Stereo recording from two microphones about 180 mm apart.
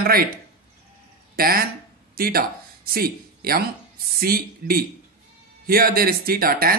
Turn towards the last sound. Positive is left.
turn(degrees=-55)  # may be behind; listen again after turning